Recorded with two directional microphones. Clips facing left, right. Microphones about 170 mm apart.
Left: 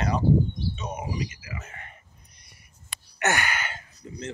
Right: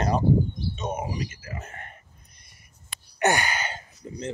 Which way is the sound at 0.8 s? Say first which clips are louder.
Right 5 dB; 45° right (ahead or behind).